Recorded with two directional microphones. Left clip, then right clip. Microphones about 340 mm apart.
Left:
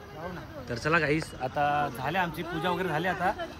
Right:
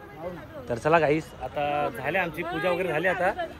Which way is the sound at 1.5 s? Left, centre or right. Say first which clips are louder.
Right 1 dB; centre.